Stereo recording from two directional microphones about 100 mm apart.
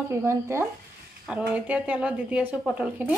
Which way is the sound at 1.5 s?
15° right (ahead or behind).